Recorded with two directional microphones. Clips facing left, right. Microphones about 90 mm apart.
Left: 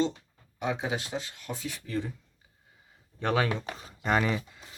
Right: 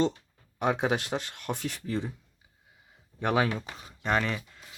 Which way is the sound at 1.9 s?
20° right (ahead or behind).